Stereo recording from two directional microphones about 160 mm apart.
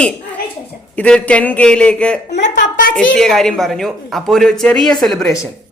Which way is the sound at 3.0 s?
5° left (ahead or behind).